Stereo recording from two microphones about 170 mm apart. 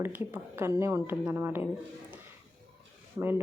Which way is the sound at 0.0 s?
15° right (ahead or behind).